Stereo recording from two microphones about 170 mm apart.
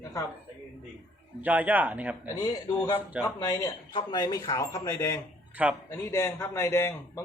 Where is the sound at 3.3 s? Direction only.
20° left (ahead or behind).